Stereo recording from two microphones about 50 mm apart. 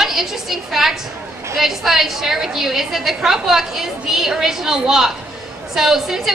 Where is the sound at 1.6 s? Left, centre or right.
Centre.